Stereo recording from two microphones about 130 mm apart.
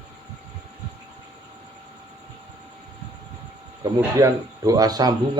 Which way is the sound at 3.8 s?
25° right (ahead or behind).